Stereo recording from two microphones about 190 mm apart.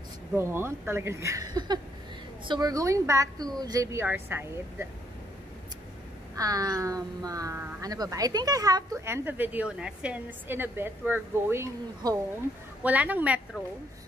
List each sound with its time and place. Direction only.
0.4 s speech: 15° right (ahead or behind)
6.3 s speech: 20° right (ahead or behind)